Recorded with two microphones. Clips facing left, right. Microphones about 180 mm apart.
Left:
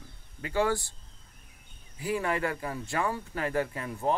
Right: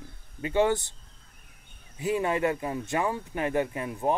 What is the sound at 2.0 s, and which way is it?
Speech, 20° right (ahead or behind).